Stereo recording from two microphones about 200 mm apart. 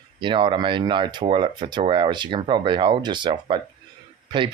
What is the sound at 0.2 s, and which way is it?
Speech, 25° right (ahead or behind).